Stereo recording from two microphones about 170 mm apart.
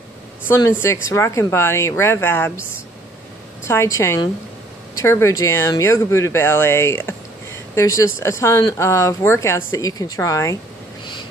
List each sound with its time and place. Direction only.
0.5 s speech: 15° left (ahead or behind)
3.6 s speech: 15° left (ahead or behind)